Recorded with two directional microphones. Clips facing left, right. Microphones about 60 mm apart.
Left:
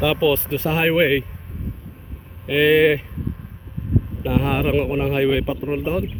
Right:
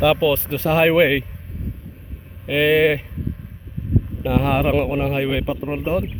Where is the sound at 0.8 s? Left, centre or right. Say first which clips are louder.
Right 2 dB; right.